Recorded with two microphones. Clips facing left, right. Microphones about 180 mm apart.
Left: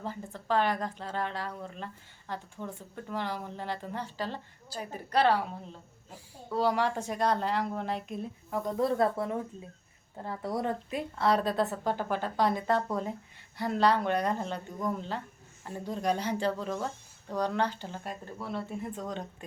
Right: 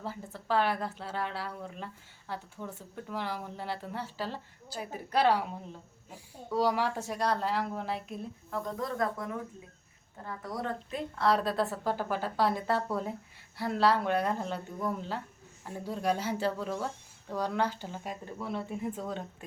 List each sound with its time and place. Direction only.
0.0 s speech: 10° right (ahead or behind)
8.4 s speech: 15° left (ahead or behind)
8.7 s speech: 25° left (ahead or behind)
10.9 s speech: 5° left (ahead or behind)